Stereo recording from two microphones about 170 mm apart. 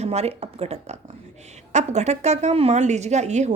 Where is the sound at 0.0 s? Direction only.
40° right (ahead or behind).